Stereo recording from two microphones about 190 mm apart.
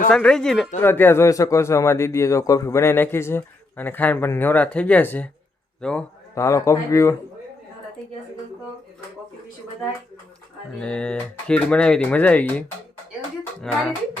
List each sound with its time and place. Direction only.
0.1 s a man's voice: 5° left (ahead or behind)
6.3 s a man's voice: 15° left (ahead or behind)
10.8 s speech: 5° left (ahead or behind)